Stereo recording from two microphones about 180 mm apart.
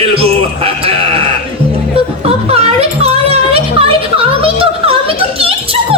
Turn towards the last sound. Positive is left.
turn(degrees=-35)  # may be behind; listen again after turning